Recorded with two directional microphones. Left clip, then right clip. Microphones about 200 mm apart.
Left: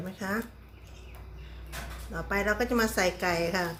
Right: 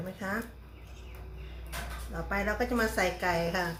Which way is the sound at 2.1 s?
50° left (ahead or behind).